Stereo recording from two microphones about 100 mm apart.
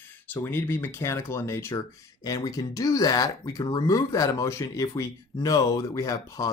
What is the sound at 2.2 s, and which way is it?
Speech, 40° left (ahead or behind).